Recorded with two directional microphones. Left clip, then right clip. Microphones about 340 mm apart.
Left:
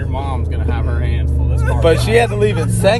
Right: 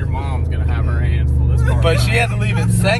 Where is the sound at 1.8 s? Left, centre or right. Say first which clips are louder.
Left 5 dB; left.